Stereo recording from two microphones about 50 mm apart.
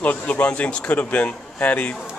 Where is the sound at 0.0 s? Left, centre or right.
Left.